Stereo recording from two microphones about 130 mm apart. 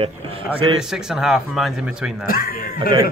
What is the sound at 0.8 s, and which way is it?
A man's voice, 5° right (ahead or behind).